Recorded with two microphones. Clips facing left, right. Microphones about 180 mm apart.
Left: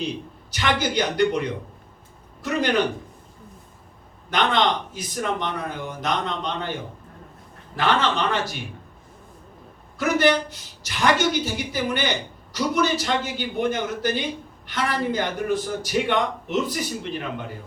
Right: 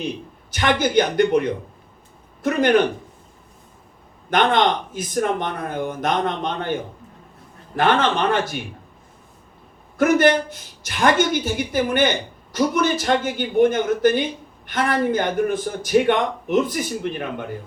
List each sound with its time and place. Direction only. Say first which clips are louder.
0.5 s a man's voice: right 5 dB; 50° right (ahead or behind)
4.3 s a man's voice: right 4 dB; 50° right (ahead or behind)
7.8 s a man's voice: right 4 dB; 50° right (ahead or behind)
10.0 s a man's voice: right 4 dB; 50° right (ahead or behind)